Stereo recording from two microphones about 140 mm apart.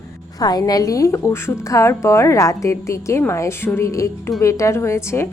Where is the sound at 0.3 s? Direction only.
25° left (ahead or behind).